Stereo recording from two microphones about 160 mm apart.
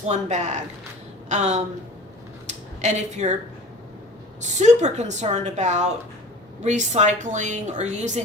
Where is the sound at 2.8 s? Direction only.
45° right (ahead or behind).